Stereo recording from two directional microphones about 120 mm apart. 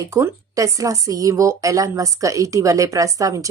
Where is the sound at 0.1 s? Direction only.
25° right (ahead or behind).